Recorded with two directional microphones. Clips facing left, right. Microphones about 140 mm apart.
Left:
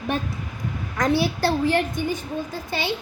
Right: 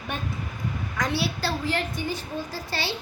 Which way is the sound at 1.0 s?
50° left (ahead or behind).